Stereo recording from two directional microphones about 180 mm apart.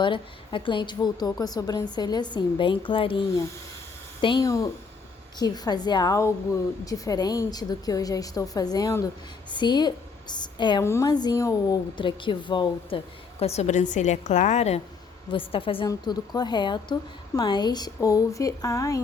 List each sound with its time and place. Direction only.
0.0 s a woman's voice: 30° left (ahead or behind)
13.4 s a woman's voice: 35° left (ahead or behind); by 19.0 s 20° left (ahead or behind)